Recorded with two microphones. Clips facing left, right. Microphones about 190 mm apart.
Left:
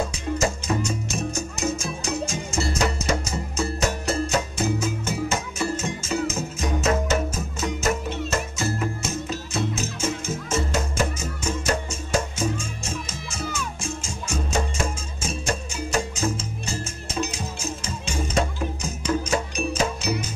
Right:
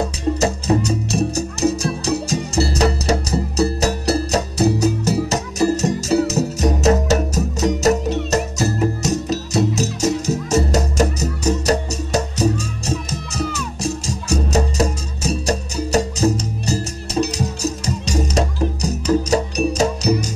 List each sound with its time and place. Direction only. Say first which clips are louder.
0.4 s music: right 6 dB; 35° right (ahead or behind)